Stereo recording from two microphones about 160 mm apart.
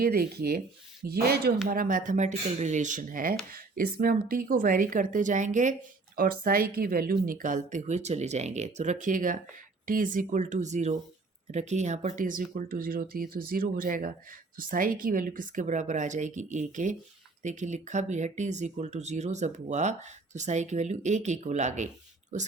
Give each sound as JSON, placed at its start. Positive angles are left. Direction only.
{"t": 0.0, "sound": "speech", "side_deg": -70}
{"t": 1.6, "sound": "speech", "side_deg": -60}
{"t": 6.1, "sound": "speech", "side_deg": -65}